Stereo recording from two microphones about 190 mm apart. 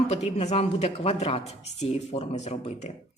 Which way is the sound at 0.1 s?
35° left (ahead or behind).